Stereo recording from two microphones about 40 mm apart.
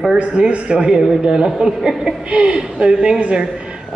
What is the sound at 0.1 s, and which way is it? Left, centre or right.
Speech, right.